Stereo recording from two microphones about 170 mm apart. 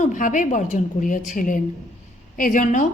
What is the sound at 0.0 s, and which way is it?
A woman's voice, 50° left (ahead or behind).